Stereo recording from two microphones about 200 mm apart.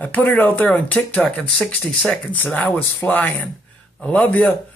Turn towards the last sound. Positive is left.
turn(degrees=10)  # may be behind; listen again after turning